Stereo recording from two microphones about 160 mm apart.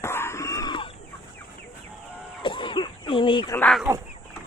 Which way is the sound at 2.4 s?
30° left (ahead or behind).